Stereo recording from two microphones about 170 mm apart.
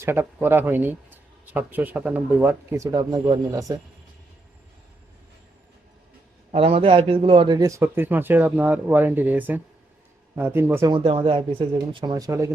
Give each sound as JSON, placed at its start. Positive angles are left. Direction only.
{"t": 0.0, "sound": "speech", "side_deg": -15}
{"t": 6.5, "sound": "speech", "side_deg": -35}
{"t": 10.9, "sound": "speech", "side_deg": -30}